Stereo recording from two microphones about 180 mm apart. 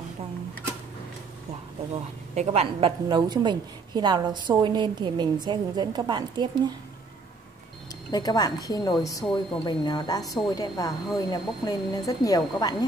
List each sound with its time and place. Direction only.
2.3 s a woman's voice: 35° right (ahead or behind)
8.1 s speech: 20° left (ahead or behind)